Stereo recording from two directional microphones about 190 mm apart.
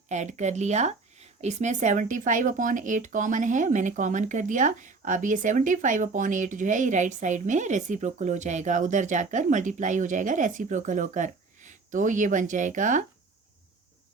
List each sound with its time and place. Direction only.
0.1 s speech: 40° right (ahead or behind)